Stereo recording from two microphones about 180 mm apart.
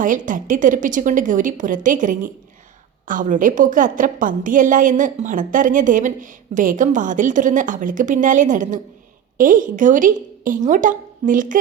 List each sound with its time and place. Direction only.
0.0 s a woman's voice: 45° right (ahead or behind)